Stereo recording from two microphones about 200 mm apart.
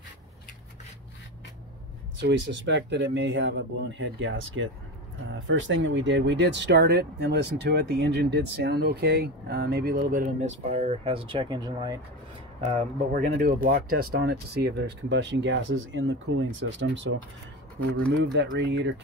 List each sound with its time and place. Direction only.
2.1 s speech: 60° right (ahead or behind); by 12.8 s 30° right (ahead or behind)
13.1 s speech: 45° right (ahead or behind); by 17.2 s 70° right (ahead or behind)
18.2 s speech: 60° right (ahead or behind)